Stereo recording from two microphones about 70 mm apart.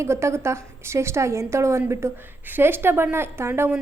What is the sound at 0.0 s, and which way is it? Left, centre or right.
A woman's voice, right.